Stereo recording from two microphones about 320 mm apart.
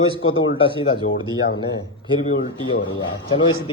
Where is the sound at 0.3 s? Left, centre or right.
Centre.